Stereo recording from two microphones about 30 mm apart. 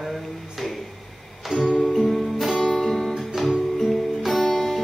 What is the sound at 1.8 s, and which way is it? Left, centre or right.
Music, centre.